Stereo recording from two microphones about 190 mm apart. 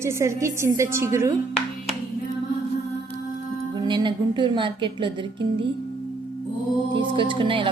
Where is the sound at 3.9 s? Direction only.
25° right (ahead or behind).